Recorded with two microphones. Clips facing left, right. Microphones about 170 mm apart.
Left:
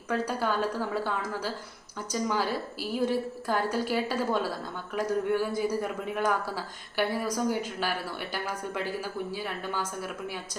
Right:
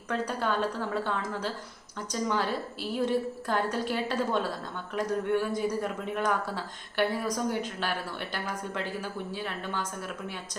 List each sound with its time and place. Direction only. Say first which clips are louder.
0.1 s a man's voice: left 1 dB; 5° left (ahead or behind)
2.2 s a man's voice: even; 5° left (ahead or behind)